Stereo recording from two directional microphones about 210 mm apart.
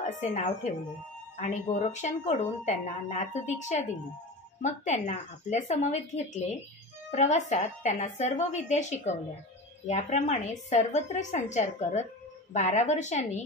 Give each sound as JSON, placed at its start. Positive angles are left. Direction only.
{"t": 0.0, "sound": "speech", "side_deg": 35}